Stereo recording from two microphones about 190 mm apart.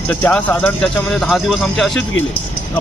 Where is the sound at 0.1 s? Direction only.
5° left (ahead or behind).